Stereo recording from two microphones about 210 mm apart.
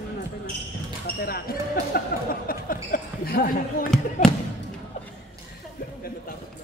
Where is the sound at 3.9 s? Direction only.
5° left (ahead or behind).